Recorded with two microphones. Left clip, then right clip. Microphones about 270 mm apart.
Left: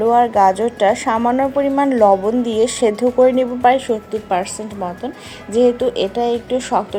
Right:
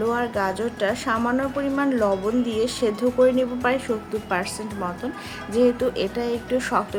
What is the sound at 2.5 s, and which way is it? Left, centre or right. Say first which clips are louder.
Speech: left 8 dB; centre.